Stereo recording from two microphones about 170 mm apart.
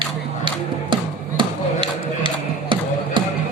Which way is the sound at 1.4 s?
30° right (ahead or behind).